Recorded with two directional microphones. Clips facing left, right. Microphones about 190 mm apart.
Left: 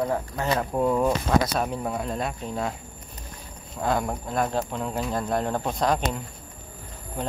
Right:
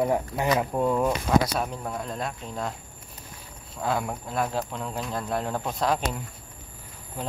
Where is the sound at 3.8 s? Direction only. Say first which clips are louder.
Left 2 dB; 5° right (ahead or behind).